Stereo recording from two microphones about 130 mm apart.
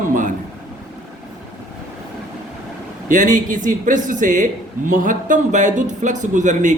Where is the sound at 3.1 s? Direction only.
80° right.